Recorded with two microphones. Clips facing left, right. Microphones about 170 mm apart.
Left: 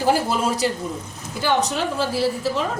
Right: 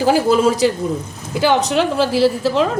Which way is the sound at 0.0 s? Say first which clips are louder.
Right 7 dB; 90° right.